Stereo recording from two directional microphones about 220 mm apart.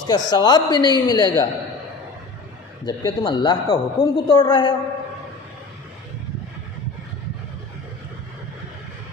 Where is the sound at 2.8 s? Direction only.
20° left (ahead or behind).